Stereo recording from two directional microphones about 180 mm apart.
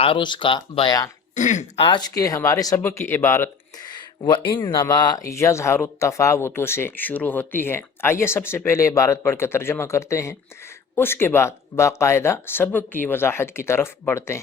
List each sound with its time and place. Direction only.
0.0 s speech: 30° left (ahead or behind)
1.4 s speech: 45° left (ahead or behind); by 14.4 s 15° left (ahead or behind)